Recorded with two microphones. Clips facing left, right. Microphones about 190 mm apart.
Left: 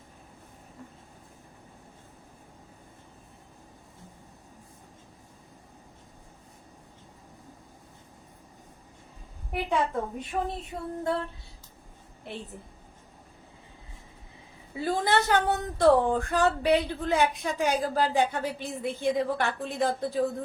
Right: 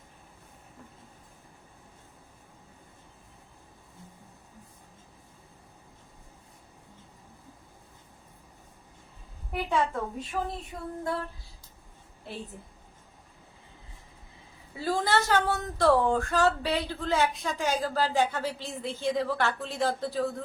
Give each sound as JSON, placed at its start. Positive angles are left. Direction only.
{"t": 9.6, "sound": "speech", "side_deg": 20}
{"t": 14.8, "sound": "speech", "side_deg": 20}